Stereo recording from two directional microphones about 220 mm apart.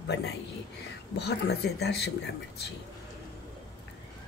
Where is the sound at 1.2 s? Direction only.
50° left (ahead or behind).